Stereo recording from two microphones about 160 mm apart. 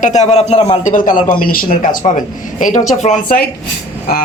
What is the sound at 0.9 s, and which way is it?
A woman's voice, 55° left (ahead or behind).